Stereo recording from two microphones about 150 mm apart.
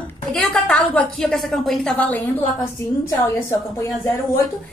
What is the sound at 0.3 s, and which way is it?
A woman's voice, 5° left (ahead or behind).